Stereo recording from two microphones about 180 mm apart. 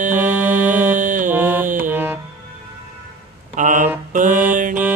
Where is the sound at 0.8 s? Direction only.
45° right (ahead or behind).